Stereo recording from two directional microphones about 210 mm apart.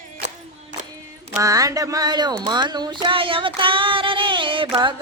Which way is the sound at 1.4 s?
15° right (ahead or behind).